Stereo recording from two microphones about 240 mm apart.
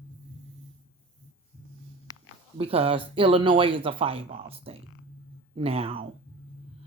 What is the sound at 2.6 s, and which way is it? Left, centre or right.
Speech, right.